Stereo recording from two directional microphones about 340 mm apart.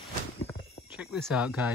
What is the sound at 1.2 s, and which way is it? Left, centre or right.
Speech, centre.